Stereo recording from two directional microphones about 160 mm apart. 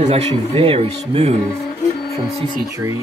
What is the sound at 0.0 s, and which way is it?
Speech, 40° right (ahead or behind).